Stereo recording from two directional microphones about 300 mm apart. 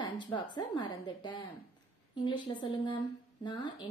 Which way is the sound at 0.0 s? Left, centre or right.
Centre.